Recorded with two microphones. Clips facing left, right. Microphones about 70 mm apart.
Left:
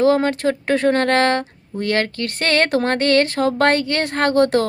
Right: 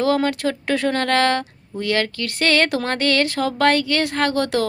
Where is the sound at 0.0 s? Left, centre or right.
Left.